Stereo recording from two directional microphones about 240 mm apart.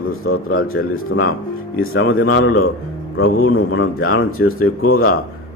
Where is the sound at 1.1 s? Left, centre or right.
Left.